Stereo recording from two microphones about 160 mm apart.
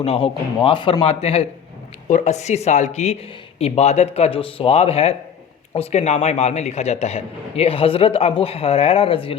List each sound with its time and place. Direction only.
0.0 s a man's voice: 35° left (ahead or behind)
2.0 s a man's voice: 50° left (ahead or behind)